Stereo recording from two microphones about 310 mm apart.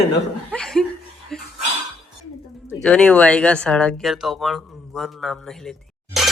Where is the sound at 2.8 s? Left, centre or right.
Centre.